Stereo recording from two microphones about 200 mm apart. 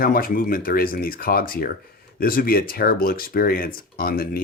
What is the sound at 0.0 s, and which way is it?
Speech, 45° left (ahead or behind).